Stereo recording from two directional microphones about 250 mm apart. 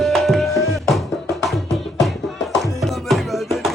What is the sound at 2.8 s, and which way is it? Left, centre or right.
Music, centre.